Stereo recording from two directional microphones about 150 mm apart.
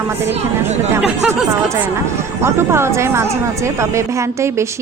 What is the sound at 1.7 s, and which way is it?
Speech, 15° right (ahead or behind).